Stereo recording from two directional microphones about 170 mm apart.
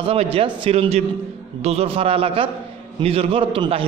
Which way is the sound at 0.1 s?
35° right (ahead or behind).